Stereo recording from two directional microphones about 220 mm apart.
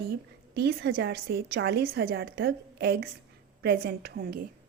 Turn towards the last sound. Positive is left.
turn(degrees=-45)  # may be behind; listen again after turning